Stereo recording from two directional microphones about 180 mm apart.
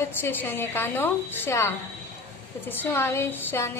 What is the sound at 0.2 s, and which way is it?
A woman's voice, 10° left (ahead or behind).